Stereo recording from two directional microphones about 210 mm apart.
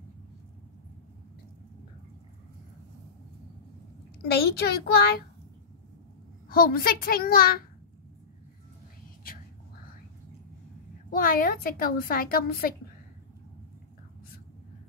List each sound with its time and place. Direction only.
4.2 s a woman's voice: 50° left (ahead or behind)
6.5 s a woman's voice: 45° left (ahead or behind)
11.1 s a woman's voice: 40° left (ahead or behind)